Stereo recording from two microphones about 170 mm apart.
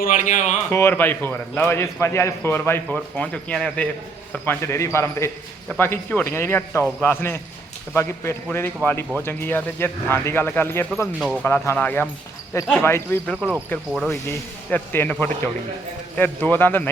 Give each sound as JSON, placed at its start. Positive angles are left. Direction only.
{"t": 0.0, "sound": "speech", "side_deg": 50}
{"t": 0.7, "sound": "a man's voice", "side_deg": 15}
{"t": 10.9, "sound": "speech", "side_deg": 0}
{"t": 11.4, "sound": "a man's voice", "side_deg": 15}
{"t": 13.3, "sound": "speech", "side_deg": -5}
{"t": 14.1, "sound": "a man's voice", "side_deg": 15}